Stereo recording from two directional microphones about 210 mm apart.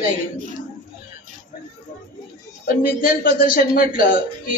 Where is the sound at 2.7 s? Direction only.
40° left (ahead or behind).